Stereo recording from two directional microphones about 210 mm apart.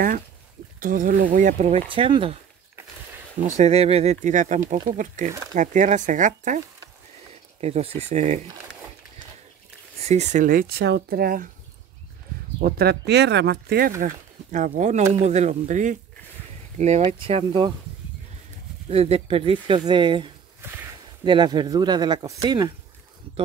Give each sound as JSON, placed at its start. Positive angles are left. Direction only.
{"t": 0.7, "sound": "speech", "side_deg": -40}
{"t": 3.4, "sound": "speech", "side_deg": -30}
{"t": 7.6, "sound": "speech", "side_deg": -30}
{"t": 10.0, "sound": "speech", "side_deg": -30}
{"t": 12.5, "sound": "speech", "side_deg": -45}
{"t": 18.9, "sound": "speech", "side_deg": -30}